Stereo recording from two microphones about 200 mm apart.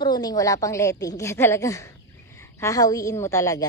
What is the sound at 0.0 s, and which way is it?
A woman's voice, 20° left (ahead or behind).